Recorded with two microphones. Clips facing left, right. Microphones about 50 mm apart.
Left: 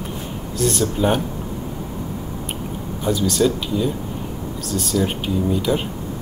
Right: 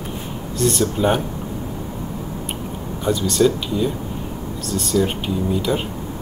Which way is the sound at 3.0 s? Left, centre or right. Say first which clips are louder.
Right 1 dB; centre.